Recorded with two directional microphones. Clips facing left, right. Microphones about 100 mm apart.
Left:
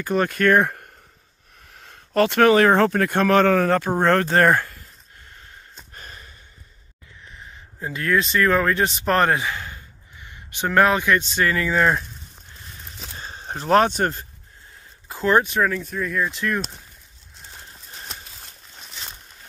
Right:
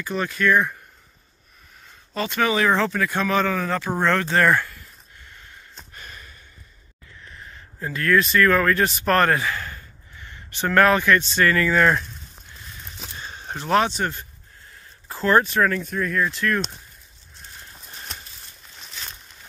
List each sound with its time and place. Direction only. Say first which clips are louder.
0.0 s speech: left 4 dB; 50° left (ahead or behind)
1.7 s speech: left 7 dB; 70° left (ahead or behind); by 3.9 s 55° left (ahead or behind)
4.0 s a sound: left 1 dB; 45° left (ahead or behind)
7.2 s speech: even; 20° left (ahead or behind)
13.1 s a sound: left 1 dB; 35° left (ahead or behind)
15.0 s speech: even; 15° left (ahead or behind)
15.7 s speech: right 1 dB; 5° left (ahead or behind); by 16.6 s 20° left (ahead or behind)